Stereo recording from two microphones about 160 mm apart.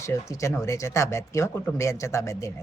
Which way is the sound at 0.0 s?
20° left (ahead or behind).